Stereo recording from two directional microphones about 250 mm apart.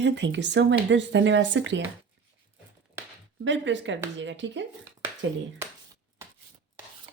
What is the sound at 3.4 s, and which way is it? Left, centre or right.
Speech, right.